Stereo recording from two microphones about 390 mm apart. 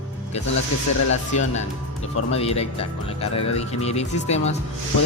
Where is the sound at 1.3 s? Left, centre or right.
Centre.